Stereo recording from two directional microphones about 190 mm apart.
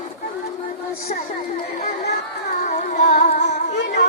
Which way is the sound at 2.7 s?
40° left (ahead or behind).